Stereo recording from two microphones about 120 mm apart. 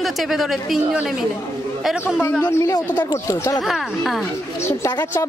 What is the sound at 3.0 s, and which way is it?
Speech, 25° left (ahead or behind).